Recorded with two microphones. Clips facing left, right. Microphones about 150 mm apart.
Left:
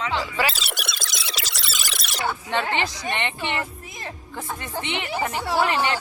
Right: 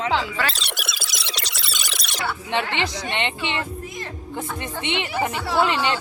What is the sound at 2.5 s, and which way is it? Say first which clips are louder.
Speech: right 2 dB; 20° right (ahead or behind).